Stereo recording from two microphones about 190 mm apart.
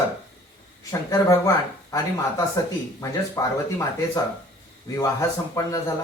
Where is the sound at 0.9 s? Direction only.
15° left (ahead or behind).